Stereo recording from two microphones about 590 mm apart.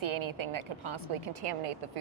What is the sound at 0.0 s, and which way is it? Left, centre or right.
A woman's voice, right.